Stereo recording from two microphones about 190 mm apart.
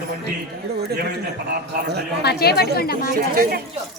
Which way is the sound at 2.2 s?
55° left (ahead or behind).